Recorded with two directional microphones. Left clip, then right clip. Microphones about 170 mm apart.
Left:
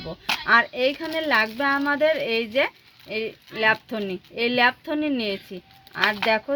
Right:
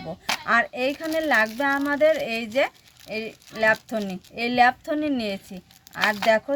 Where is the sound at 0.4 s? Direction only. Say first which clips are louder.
Left 3 dB; 25° left (ahead or behind).